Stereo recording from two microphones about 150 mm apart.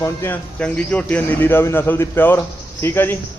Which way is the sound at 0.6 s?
10° left (ahead or behind).